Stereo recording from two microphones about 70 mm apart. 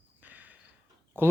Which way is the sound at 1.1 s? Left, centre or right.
Right.